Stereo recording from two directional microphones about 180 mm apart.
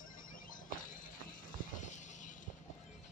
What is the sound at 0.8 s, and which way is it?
Music, 50° left (ahead or behind).